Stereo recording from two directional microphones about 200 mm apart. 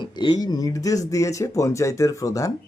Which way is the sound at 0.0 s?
20° left (ahead or behind).